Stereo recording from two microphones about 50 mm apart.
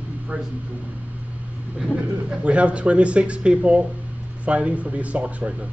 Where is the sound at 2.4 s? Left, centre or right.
Right.